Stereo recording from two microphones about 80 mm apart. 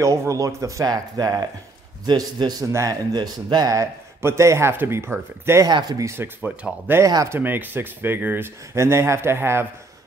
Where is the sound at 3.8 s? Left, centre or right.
Right.